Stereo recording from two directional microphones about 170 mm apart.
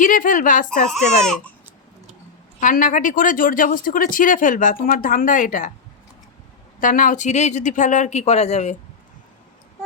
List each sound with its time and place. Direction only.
0.0 s speech: 50° left (ahead or behind)
2.6 s speech: 50° left (ahead or behind)
6.7 s speech: 50° left (ahead or behind)